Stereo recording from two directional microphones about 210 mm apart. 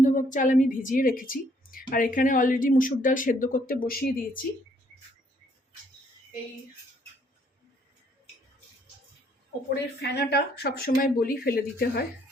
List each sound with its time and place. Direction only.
0.0 s a woman's voice: 40° left (ahead or behind)
9.6 s speech: 50° left (ahead or behind)